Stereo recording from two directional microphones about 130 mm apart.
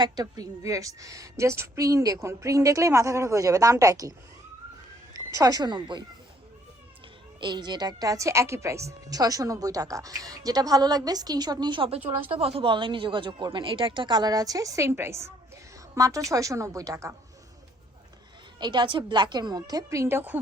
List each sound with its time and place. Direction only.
0.0 s a woman's voice: 30° right (ahead or behind)
5.1 s speech: 30° right (ahead or behind)
7.3 s a woman's voice: 35° right (ahead or behind)
18.6 s speech: 35° right (ahead or behind); by 20.4 s 15° right (ahead or behind)